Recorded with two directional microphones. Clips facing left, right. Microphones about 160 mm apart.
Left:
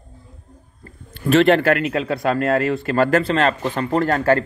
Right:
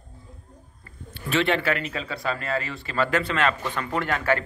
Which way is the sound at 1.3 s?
50° left (ahead or behind).